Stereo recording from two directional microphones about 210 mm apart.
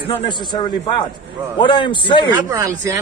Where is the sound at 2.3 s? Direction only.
15° right (ahead or behind).